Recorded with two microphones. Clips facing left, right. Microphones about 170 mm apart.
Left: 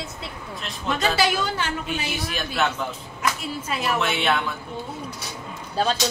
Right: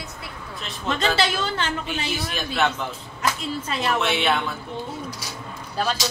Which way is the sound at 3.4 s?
5° left (ahead or behind).